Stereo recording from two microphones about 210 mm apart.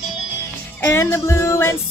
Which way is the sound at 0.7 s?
10° left (ahead or behind).